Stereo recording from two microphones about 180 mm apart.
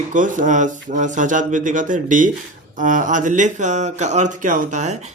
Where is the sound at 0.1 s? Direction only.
45° right (ahead or behind).